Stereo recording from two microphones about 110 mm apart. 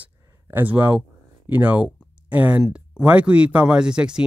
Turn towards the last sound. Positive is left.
turn(degrees=-10)  # may be behind; listen again after turning